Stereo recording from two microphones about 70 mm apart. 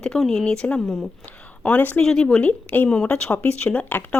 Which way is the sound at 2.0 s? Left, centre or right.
Centre.